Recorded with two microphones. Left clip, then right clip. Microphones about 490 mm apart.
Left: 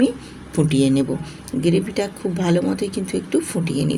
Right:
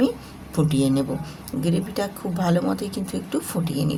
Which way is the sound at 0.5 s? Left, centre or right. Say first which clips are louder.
Left 4 dB; right.